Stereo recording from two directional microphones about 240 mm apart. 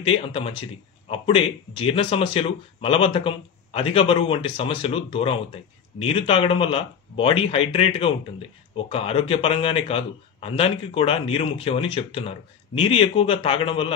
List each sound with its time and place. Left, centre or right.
0.0 s speech: left